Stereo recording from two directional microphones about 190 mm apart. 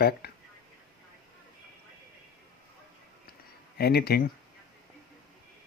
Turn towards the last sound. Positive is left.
turn(degrees=55)  # may be behind; listen again after turning